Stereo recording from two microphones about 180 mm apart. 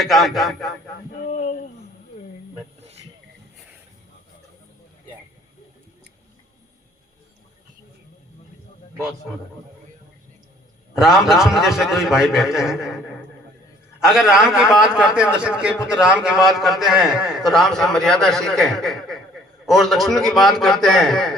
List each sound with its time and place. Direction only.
0.0 s a man's voice: centre (ahead or behind)
1.2 s a sound: 40° left (ahead or behind)
10.9 s a man's voice: centre (ahead or behind)
14.0 s a man's voice: 5° right (ahead or behind)